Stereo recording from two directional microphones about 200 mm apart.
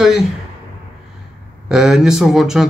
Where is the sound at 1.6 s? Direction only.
5° right (ahead or behind).